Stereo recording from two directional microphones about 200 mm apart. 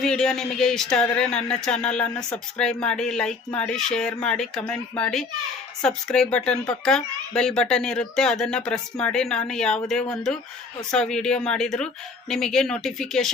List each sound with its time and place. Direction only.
0.0 s speech: 5° left (ahead or behind)